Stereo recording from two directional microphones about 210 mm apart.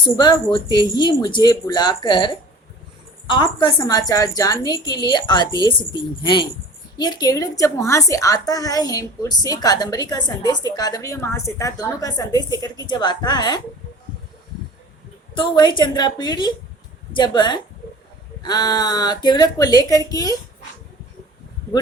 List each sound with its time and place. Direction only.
0.2 s a woman's voice: 20° left (ahead or behind)
15.4 s a woman's voice: 20° left (ahead or behind)